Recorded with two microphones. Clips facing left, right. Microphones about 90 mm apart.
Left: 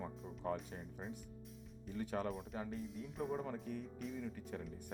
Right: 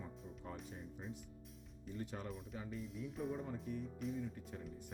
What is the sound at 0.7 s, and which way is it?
Speech, 45° left (ahead or behind).